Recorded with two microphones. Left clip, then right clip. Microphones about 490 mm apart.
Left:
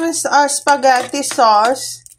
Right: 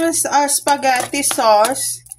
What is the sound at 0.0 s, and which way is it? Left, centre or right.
Speech, right.